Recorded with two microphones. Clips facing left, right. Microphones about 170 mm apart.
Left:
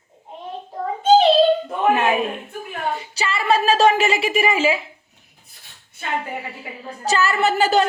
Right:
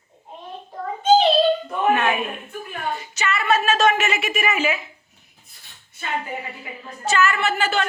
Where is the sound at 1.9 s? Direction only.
35° left (ahead or behind).